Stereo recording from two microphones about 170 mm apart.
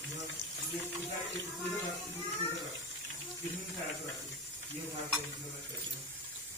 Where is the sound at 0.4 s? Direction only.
90° right.